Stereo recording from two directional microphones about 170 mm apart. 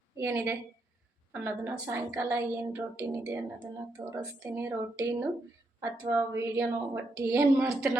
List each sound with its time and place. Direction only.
0.2 s a woman's voice: 15° right (ahead or behind)